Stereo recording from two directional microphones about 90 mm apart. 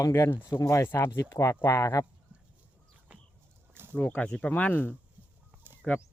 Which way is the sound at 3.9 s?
15° left (ahead or behind).